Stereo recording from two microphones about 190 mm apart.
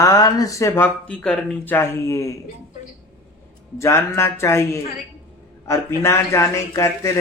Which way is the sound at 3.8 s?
15° left (ahead or behind).